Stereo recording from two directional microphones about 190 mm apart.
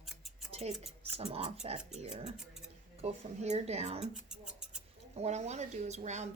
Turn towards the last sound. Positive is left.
turn(degrees=-35)  # may be behind; listen again after turning